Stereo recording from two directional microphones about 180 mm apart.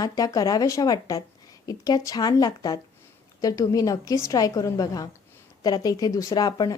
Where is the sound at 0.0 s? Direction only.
20° left (ahead or behind).